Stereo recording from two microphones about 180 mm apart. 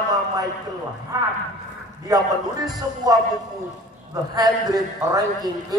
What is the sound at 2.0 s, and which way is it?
A man's voice, 20° right (ahead or behind).